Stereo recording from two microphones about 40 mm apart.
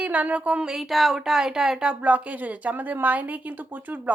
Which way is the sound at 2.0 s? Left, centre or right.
Right.